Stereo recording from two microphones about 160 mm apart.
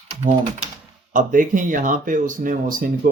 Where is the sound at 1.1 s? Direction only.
55° right (ahead or behind).